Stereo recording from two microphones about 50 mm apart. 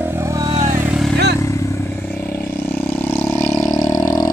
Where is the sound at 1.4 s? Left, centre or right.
Left.